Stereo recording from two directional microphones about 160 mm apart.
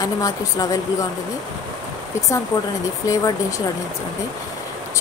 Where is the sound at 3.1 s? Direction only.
20° left (ahead or behind).